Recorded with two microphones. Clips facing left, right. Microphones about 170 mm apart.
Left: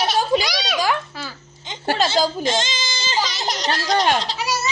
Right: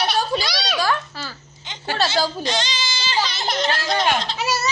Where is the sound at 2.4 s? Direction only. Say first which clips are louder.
Left 2 dB; 45° left (ahead or behind).